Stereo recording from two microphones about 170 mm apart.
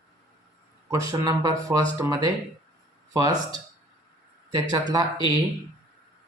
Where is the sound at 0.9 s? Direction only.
20° right (ahead or behind).